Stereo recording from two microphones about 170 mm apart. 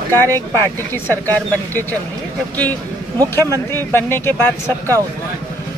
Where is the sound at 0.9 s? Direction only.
10° left (ahead or behind).